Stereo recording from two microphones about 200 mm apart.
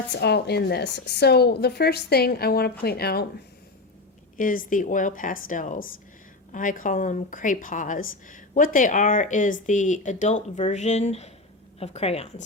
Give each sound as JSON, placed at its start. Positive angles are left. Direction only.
{"t": 0.1, "sound": "a woman's voice", "side_deg": 55}
{"t": 4.4, "sound": "a woman's voice", "side_deg": 40}